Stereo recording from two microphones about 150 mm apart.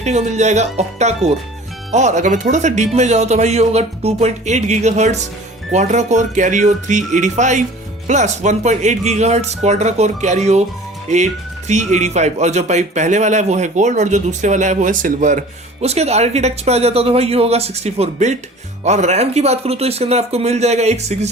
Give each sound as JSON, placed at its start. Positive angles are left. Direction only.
{"t": 0.0, "sound": "a man's voice", "side_deg": -50}
{"t": 11.7, "sound": "a man's voice", "side_deg": -50}